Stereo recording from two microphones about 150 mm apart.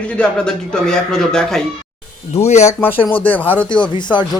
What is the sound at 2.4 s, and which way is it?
Speech, 50° left (ahead or behind).